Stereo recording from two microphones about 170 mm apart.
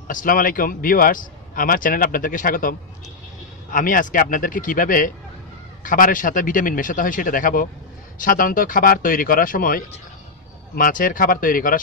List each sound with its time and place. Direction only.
0.1 s speech: 55° left (ahead or behind)
3.7 s a man's voice: 55° left (ahead or behind)